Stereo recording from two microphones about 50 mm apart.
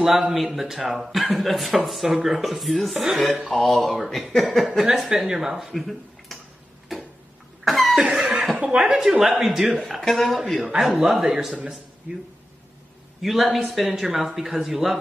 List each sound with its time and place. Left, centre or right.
0.3 s speech: centre
7.6 s cough: centre
8.0 s cough: centre
8.5 s chuckle: centre
8.9 s speech: centre
13.2 s speech: centre